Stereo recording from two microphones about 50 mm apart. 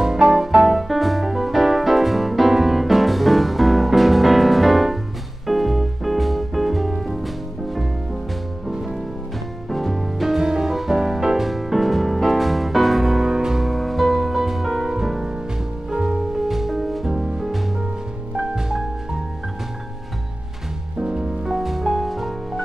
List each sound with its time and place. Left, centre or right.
0.0 s music: centre
9.7 s music: centre
21.0 s music: centre
21.5 s music: centre